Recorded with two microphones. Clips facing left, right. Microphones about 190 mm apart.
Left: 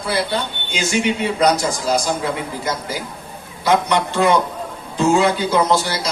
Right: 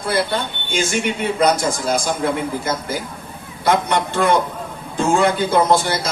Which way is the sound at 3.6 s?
50° right (ahead or behind).